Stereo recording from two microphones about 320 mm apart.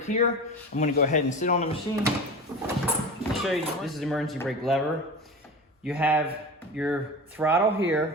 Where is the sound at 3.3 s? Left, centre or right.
Centre.